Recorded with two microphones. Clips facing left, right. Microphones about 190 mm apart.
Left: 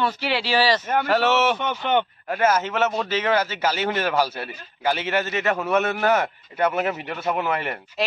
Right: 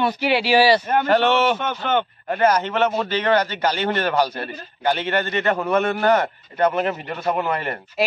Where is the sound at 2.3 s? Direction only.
5° left (ahead or behind).